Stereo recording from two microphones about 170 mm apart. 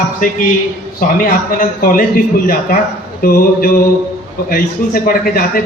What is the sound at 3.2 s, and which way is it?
A man's voice, 60° left (ahead or behind).